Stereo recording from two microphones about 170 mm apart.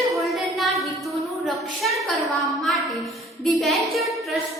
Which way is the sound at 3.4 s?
Centre (ahead or behind).